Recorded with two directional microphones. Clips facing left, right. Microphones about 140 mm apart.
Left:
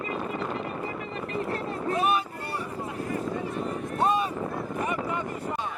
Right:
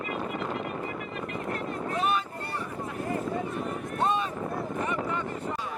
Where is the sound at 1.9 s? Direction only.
10° left (ahead or behind).